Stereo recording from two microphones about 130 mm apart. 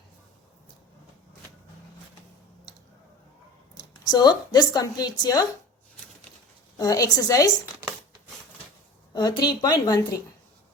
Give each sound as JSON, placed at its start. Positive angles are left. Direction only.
{"t": 3.8, "sound": "a woman's voice", "side_deg": 30}
{"t": 6.7, "sound": "a woman's voice", "side_deg": 30}
{"t": 9.1, "sound": "speech", "side_deg": 35}